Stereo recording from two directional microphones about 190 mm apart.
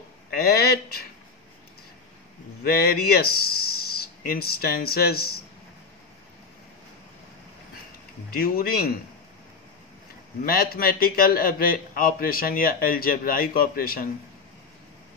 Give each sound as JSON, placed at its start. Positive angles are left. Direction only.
{"t": 0.3, "sound": "speech", "side_deg": 55}
{"t": 2.6, "sound": "speech", "side_deg": 55}
{"t": 8.3, "sound": "a man's voice", "side_deg": 50}
{"t": 10.4, "sound": "a man's voice", "side_deg": 50}